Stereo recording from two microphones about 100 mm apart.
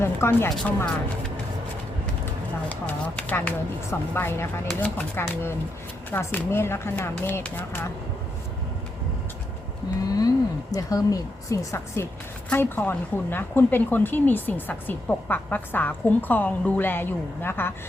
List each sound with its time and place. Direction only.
0.0 s speech: 25° left (ahead or behind)
2.6 s speech: 15° left (ahead or behind)
10.1 s a woman's voice: 40° left (ahead or behind)
12.5 s speech: 20° left (ahead or behind)